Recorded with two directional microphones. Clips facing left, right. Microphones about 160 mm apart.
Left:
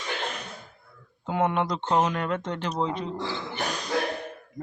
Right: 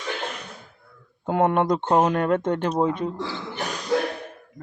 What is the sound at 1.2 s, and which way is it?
Speech, 50° right (ahead or behind).